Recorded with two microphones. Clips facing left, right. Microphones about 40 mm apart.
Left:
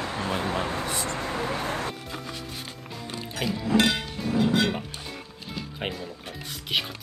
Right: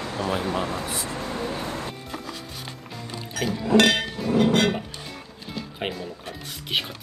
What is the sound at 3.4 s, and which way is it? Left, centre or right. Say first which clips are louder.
Liquid: right 4 dB; right.